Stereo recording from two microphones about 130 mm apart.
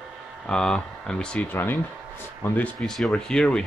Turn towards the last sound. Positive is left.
turn(degrees=5)  # may be behind; listen again after turning